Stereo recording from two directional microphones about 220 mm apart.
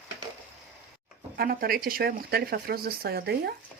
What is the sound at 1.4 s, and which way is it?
Speech, 45° right (ahead or behind).